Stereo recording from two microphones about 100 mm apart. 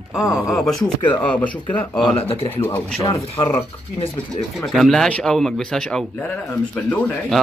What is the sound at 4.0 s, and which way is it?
Speech, 55° left (ahead or behind).